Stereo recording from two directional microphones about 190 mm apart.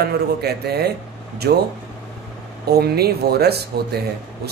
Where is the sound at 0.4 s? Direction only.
60° right (ahead or behind).